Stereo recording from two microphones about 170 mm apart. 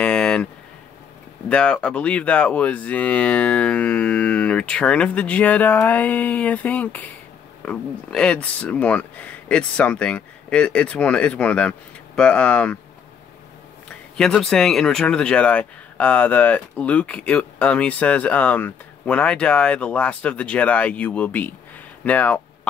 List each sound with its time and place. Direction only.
0.0 s a sound: 5° left (ahead or behind)
1.5 s speech: 5° left (ahead or behind)
13.8 s speech: 5° left (ahead or behind)